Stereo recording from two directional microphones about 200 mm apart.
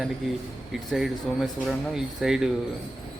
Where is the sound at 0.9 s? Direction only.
Centre (ahead or behind).